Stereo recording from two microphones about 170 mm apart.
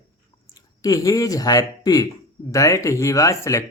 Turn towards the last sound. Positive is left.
turn(degrees=20)  # may be behind; listen again after turning